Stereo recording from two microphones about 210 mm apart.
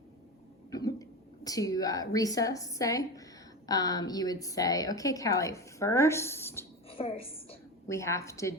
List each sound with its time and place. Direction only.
0.7 s cough: 15° left (ahead or behind)
1.5 s a woman's voice: 15° left (ahead or behind)
6.9 s a woman's voice: 25° left (ahead or behind)
7.9 s a woman's voice: 15° left (ahead or behind)